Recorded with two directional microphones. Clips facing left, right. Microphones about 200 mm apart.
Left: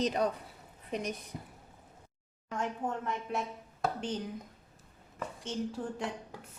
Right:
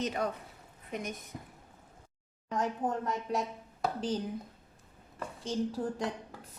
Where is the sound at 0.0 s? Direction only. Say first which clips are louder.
Left 3 dB; 35° left (ahead or behind).